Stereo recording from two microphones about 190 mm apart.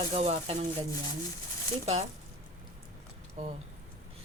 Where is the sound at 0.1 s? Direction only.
35° right (ahead or behind).